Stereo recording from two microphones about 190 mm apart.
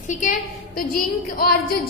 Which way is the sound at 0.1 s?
40° left (ahead or behind).